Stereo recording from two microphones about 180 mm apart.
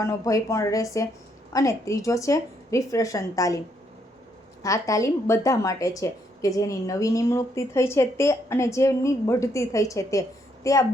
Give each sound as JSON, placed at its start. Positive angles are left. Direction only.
{"t": 0.0, "sound": "speech", "side_deg": 20}
{"t": 4.6, "sound": "speech", "side_deg": 20}